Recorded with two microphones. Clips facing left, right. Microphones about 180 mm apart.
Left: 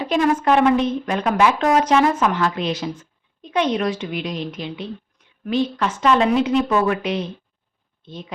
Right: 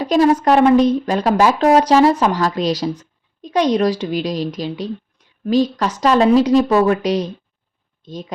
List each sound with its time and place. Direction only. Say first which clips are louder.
0.0 s a woman's voice: right 5 dB; 35° right (ahead or behind)